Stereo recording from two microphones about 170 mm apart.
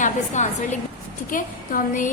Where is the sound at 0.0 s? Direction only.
45° left (ahead or behind).